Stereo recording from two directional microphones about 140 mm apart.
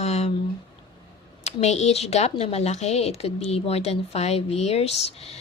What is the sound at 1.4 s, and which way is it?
Speech, 50° left (ahead or behind).